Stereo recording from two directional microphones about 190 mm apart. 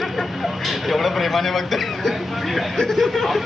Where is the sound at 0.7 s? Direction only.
Centre (ahead or behind).